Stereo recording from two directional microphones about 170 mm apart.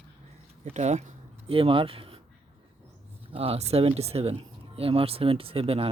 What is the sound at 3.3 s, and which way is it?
Speech, 35° right (ahead or behind).